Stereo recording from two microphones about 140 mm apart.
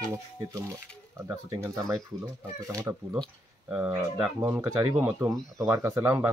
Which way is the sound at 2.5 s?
20° right (ahead or behind).